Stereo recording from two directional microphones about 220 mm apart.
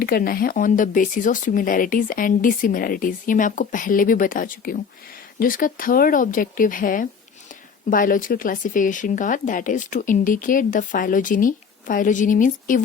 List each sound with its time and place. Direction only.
0.0 s speech: 40° left (ahead or behind)